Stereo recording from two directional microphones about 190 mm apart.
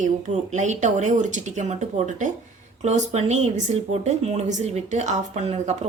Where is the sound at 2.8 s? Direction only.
35° right (ahead or behind).